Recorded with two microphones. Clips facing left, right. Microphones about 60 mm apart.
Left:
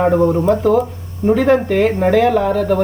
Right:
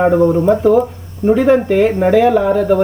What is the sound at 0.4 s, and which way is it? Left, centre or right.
Speech, centre.